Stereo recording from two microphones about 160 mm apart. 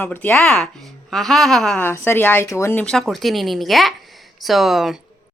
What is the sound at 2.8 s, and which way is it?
Speech, centre (ahead or behind).